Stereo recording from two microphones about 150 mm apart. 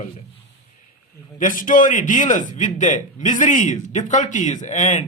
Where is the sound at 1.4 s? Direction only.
60° left (ahead or behind).